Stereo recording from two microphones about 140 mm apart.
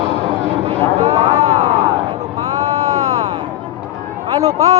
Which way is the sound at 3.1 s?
45° right (ahead or behind).